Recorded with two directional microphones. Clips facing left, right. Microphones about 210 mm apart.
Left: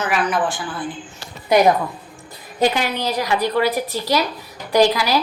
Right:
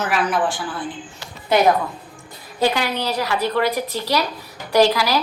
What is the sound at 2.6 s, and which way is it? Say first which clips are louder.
A woman's voice: left 1 dB; 15° left (ahead or behind).